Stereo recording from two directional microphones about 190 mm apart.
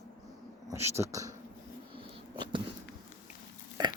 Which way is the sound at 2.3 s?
25° right (ahead or behind).